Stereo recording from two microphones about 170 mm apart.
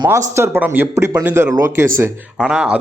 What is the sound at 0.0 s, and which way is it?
Speech, 15° right (ahead or behind).